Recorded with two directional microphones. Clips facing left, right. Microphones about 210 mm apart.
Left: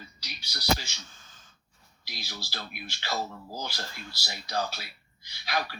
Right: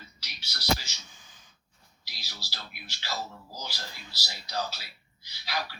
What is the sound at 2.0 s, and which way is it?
Speech, 55° left (ahead or behind).